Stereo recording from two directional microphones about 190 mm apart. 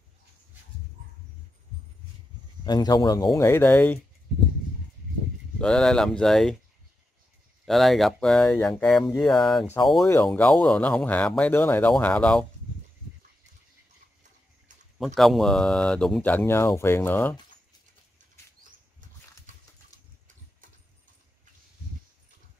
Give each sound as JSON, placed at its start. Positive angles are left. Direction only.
{"t": 2.6, "sound": "speech", "side_deg": 20}
{"t": 5.6, "sound": "speech", "side_deg": 5}
{"t": 7.6, "sound": "speech", "side_deg": 0}
{"t": 15.1, "sound": "speech", "side_deg": 0}